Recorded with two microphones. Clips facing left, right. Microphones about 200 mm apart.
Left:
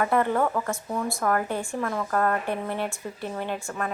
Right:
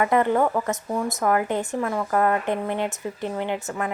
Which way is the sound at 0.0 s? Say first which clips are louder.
Right 3 dB; 15° right (ahead or behind).